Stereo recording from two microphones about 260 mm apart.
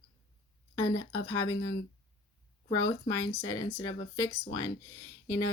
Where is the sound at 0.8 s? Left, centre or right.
Centre.